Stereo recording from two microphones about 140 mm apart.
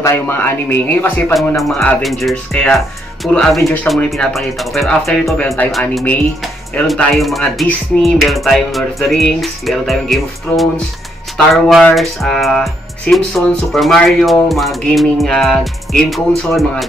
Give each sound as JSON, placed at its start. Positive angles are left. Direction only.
{"t": 0.0, "sound": "speech", "side_deg": 15}
{"t": 1.6, "sound": "speech", "side_deg": 0}